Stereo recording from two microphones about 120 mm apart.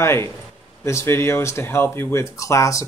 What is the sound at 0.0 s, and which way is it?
Speech, 20° left (ahead or behind).